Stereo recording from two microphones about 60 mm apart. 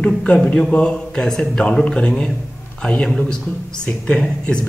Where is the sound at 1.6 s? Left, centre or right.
Centre.